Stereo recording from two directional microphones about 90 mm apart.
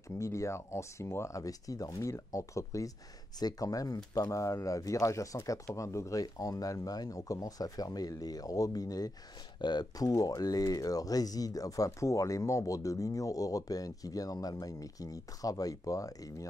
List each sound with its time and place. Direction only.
0.2 s speech: 35° left (ahead or behind)
9.6 s speech: 55° left (ahead or behind)